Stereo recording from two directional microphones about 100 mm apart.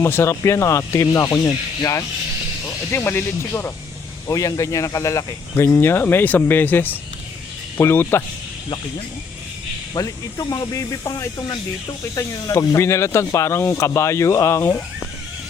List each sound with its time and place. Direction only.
0.0 s speech: 25° left (ahead or behind)
9.9 s speech: 40° left (ahead or behind)